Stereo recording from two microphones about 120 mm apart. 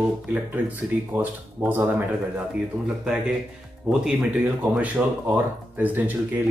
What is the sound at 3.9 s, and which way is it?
Speech, 5° right (ahead or behind).